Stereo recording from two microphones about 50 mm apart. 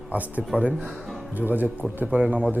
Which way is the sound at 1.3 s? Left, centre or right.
Right.